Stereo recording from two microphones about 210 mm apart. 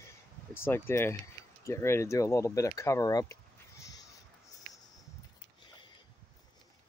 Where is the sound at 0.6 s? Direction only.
10° left (ahead or behind).